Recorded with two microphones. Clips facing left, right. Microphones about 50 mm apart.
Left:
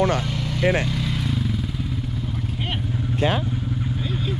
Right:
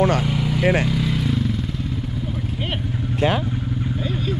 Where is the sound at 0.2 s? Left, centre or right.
Centre.